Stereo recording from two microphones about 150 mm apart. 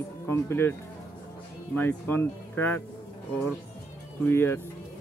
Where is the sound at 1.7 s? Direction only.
15° left (ahead or behind).